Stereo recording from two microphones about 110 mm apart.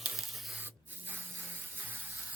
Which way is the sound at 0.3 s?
Centre (ahead or behind).